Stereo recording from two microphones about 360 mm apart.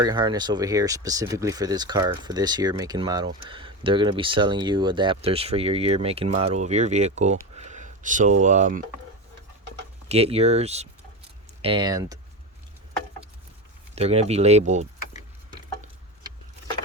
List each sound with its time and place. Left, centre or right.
0.0 s speech: centre
10.1 s speech: centre
13.9 s speech: centre